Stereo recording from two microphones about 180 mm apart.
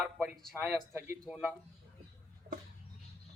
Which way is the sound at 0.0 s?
15° right (ahead or behind).